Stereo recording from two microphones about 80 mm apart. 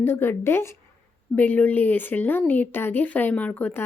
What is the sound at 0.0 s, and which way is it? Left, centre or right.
Speech, left.